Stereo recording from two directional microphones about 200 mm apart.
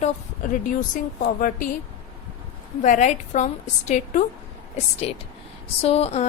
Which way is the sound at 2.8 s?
40° left (ahead or behind).